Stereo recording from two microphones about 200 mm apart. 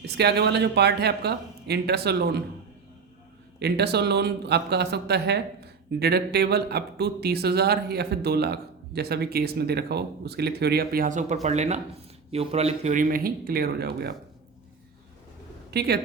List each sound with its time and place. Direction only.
0.0 s a man's voice: 55° right (ahead or behind)
3.6 s a man's voice: 55° right (ahead or behind)
15.7 s speech: 55° right (ahead or behind)